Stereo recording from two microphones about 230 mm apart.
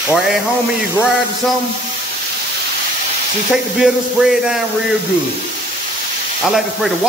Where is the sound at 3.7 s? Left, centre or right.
Centre.